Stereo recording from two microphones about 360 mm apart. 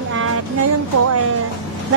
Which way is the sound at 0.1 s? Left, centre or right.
Right.